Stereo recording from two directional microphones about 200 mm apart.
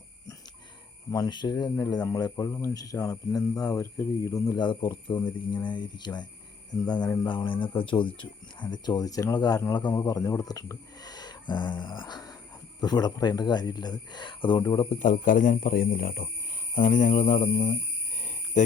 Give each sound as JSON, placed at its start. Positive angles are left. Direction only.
{"t": 1.1, "sound": "speech", "side_deg": 20}
{"t": 14.8, "sound": "speech", "side_deg": 40}
{"t": 16.7, "sound": "a sound", "side_deg": 40}
{"t": 18.2, "sound": "cricket", "side_deg": 35}